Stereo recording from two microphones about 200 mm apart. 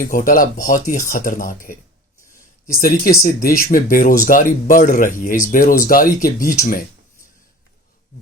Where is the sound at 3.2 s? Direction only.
45° left (ahead or behind).